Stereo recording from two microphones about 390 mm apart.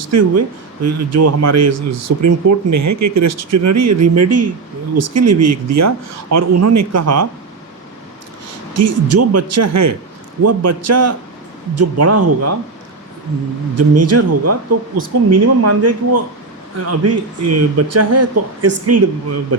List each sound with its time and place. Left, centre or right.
0.1 s a man's voice: right
8.7 s a man's voice: right
13.7 s a man's voice: right